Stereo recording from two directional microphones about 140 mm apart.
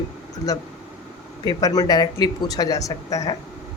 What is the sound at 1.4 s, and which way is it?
Speech, 30° left (ahead or behind).